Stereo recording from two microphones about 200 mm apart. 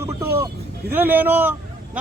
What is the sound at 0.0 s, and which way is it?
Vehicle, 10° right (ahead or behind).